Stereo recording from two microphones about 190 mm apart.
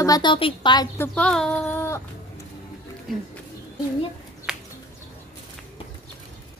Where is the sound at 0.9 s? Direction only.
10° left (ahead or behind).